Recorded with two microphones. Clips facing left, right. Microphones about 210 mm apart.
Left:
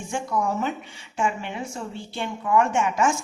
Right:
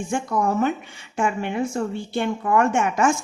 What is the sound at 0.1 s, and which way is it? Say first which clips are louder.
A woman's voice: right 3 dB; 55° right (ahead or behind).